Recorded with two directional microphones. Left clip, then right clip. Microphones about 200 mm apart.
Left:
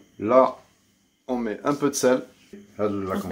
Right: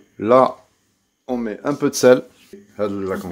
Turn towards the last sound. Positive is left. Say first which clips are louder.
# right 3 dB
turn(degrees=-45)  # may be behind; listen again after turning